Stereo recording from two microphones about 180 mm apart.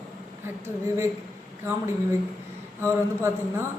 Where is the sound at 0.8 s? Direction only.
15° right (ahead or behind).